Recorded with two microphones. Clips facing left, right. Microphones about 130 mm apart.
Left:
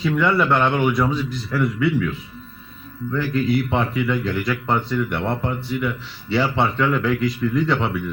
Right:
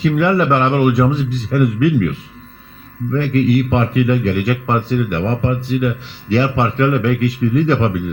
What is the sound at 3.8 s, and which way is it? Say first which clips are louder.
A man's voice: right 6 dB; 55° right (ahead or behind).